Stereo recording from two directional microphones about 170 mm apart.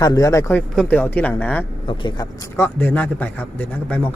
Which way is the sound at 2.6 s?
10° left (ahead or behind).